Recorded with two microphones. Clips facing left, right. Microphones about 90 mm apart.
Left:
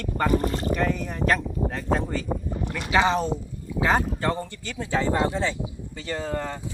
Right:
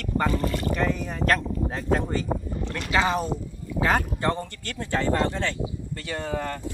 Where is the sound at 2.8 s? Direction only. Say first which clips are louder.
Left 2 dB; 25° left (ahead or behind).